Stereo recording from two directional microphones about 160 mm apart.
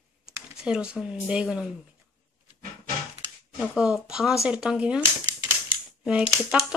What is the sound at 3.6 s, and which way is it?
Speech, 5° right (ahead or behind).